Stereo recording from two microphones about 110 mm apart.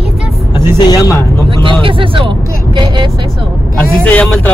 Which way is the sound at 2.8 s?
45° right (ahead or behind).